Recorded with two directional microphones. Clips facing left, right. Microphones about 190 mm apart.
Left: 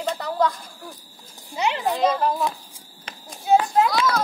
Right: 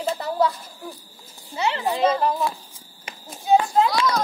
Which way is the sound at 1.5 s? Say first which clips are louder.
Even; 15° left (ahead or behind).